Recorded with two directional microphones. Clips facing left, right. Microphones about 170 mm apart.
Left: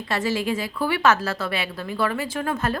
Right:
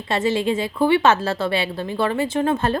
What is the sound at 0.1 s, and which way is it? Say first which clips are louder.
A woman's voice: right 4 dB; 25° right (ahead or behind).